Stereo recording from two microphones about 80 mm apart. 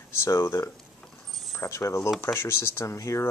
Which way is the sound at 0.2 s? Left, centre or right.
Left.